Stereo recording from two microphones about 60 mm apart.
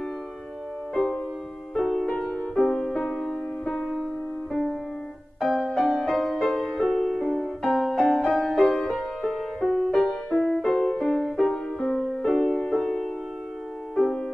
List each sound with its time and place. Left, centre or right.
1.8 s music: centre
2.0 s music: centre
2.5 s music: centre